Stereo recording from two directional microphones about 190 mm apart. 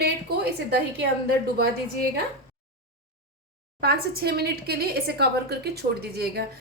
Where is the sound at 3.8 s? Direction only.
55° right (ahead or behind).